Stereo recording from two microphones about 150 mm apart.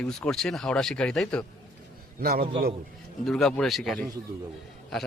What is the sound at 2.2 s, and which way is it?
Speech, 90° right.